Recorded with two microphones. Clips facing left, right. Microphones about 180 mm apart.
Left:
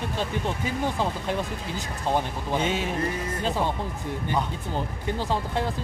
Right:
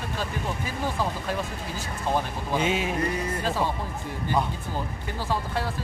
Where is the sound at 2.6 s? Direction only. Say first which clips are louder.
Right 2 dB; 10° right (ahead or behind).